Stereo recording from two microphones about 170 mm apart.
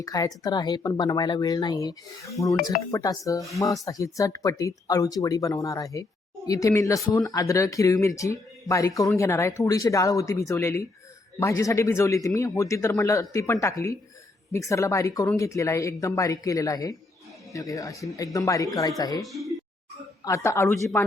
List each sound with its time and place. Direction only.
0.0 s speech: 20° left (ahead or behind)
19.2 s speech: centre (ahead or behind)
20.2 s speech: 20° left (ahead or behind)